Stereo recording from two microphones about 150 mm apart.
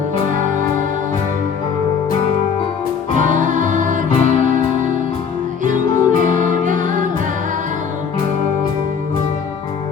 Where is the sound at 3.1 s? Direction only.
60° right (ahead or behind).